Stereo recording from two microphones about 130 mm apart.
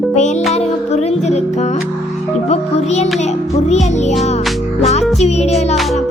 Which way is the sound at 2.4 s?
55° left (ahead or behind).